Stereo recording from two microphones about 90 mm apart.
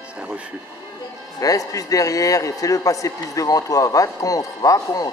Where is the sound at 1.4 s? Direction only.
40° left (ahead or behind).